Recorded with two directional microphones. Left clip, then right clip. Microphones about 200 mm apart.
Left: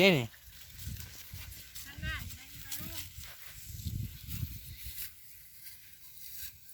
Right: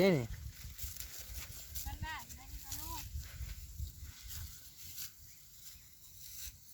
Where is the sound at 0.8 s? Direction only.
45° right (ahead or behind).